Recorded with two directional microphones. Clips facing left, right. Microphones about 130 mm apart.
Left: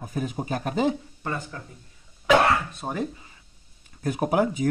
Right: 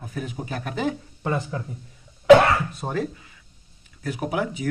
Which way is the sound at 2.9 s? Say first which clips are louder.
Right 1 dB; 20° left (ahead or behind).